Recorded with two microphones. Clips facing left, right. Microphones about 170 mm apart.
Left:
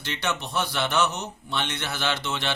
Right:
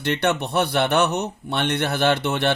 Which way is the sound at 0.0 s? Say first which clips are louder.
Right 8 dB; 60° right (ahead or behind).